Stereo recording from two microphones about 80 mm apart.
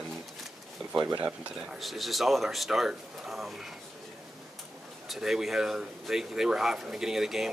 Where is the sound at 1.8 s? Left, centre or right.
Centre.